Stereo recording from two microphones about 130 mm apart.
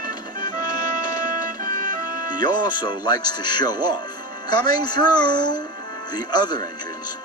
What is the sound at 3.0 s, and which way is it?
Speech, 35° left (ahead or behind).